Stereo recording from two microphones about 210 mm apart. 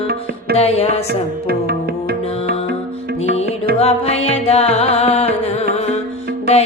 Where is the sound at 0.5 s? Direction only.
30° left (ahead or behind).